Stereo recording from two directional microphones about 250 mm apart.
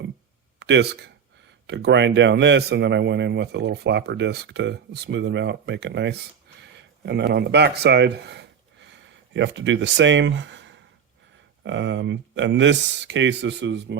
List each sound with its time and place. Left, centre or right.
0.6 s speech: right